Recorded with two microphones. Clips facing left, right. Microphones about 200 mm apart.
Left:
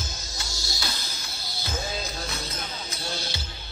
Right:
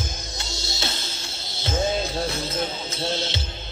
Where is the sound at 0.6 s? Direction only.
25° right (ahead or behind).